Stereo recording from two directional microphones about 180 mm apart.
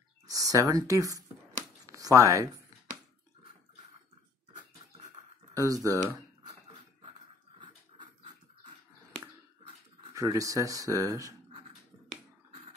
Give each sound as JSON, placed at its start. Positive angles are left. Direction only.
{"t": 0.3, "sound": "speech", "side_deg": -20}
{"t": 5.6, "sound": "speech", "side_deg": -20}
{"t": 10.1, "sound": "speech", "side_deg": -20}